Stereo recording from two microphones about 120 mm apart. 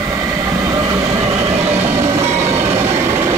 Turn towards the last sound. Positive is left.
turn(degrees=-25)  # may be behind; listen again after turning